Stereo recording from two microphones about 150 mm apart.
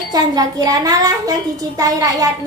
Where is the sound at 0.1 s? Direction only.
25° right (ahead or behind).